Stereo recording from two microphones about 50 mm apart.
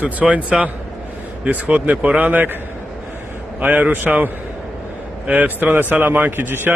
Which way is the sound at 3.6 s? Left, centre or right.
Right.